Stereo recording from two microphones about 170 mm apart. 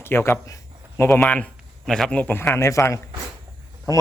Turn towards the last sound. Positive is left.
turn(degrees=20)  # may be behind; listen again after turning